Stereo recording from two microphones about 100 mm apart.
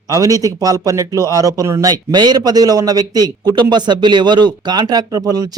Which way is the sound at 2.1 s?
45° right (ahead or behind).